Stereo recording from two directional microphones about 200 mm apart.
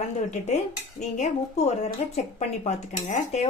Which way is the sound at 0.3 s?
35° left (ahead or behind).